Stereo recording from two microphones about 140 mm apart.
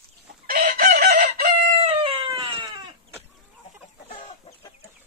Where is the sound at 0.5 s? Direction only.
85° right; by 1.3 s 65° right (ahead or behind).